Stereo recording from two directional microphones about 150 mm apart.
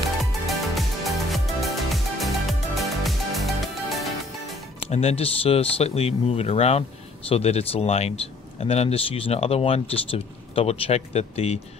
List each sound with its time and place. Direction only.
0.2 s music: centre (ahead or behind)
4.8 s speech: 45° left (ahead or behind)